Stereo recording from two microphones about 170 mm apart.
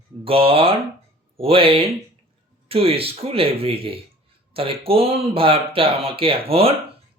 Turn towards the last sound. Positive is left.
turn(degrees=-35)  # may be behind; listen again after turning